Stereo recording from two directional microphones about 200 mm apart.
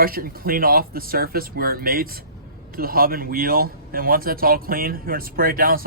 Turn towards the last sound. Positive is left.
turn(degrees=-45)  # may be behind; listen again after turning